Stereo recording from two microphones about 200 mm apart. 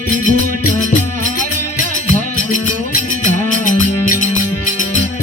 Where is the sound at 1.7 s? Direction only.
40° left (ahead or behind).